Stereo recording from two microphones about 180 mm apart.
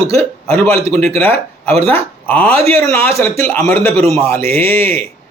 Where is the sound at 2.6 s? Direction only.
35° right (ahead or behind).